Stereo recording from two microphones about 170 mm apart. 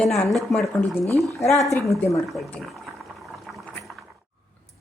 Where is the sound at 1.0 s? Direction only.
20° right (ahead or behind).